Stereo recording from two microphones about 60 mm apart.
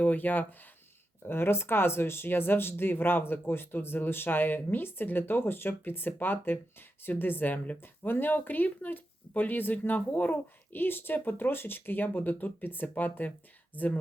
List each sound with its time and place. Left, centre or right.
0.0 s speech: left
1.3 s speech: left